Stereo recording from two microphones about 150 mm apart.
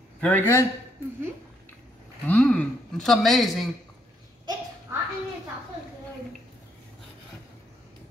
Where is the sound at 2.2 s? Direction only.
10° left (ahead or behind).